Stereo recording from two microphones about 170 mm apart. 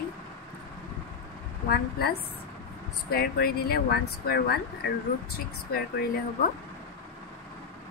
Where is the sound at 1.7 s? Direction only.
65° left (ahead or behind).